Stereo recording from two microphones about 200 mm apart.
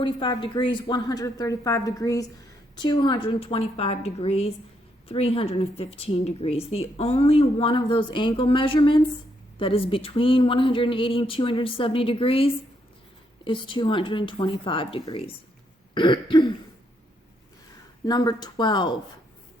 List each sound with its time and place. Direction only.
0.0 s a woman's voice: 25° left (ahead or behind)
18.0 s a woman's voice: 20° left (ahead or behind)